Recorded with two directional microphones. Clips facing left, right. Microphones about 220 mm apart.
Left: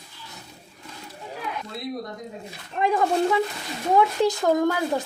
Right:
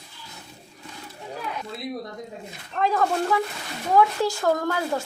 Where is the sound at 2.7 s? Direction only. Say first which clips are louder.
Left 1 dB; 15° left (ahead or behind).